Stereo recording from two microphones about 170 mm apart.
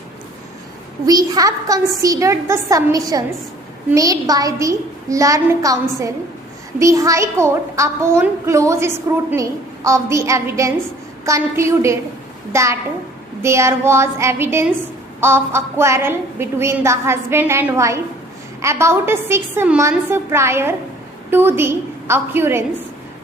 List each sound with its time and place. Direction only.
1.0 s a woman's voice: 20° right (ahead or behind)